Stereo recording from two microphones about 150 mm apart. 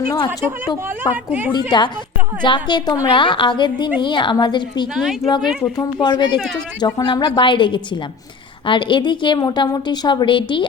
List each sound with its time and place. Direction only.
1.1 s a woman's voice: 10° right (ahead or behind)
1.5 s a woman's voice: 30° left (ahead or behind)
4.9 s speech: 5° right (ahead or behind)
5.7 s a woman's voice: 25° left (ahead or behind)